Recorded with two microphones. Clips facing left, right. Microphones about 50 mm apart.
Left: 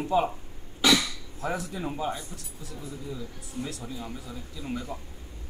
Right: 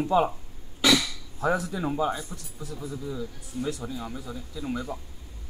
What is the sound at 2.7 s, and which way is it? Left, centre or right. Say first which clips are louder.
Speech: right 4 dB; right.